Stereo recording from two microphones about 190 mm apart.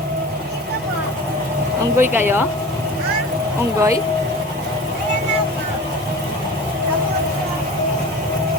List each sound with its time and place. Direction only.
2.0 s speech: 10° right (ahead or behind)
3.8 s speech: 15° right (ahead or behind)